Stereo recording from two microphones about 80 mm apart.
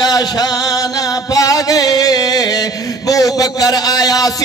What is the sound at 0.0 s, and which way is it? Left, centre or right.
Music, left.